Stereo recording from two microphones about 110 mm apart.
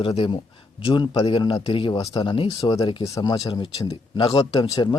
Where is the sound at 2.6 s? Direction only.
35° left (ahead or behind).